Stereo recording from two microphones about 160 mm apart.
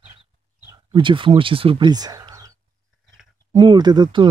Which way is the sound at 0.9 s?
30° right (ahead or behind).